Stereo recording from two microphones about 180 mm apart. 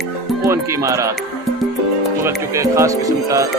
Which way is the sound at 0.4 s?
15° right (ahead or behind).